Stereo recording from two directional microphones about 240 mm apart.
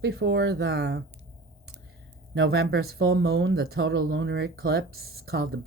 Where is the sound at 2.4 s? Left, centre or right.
Right.